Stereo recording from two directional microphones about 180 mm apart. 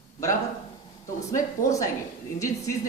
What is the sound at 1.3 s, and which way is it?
Speech, 15° left (ahead or behind).